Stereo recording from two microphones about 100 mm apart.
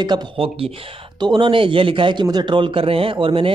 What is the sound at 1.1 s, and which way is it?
A man's voice, 50° right (ahead or behind).